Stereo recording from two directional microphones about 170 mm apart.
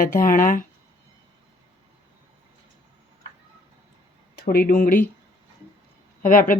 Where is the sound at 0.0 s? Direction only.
55° left (ahead or behind).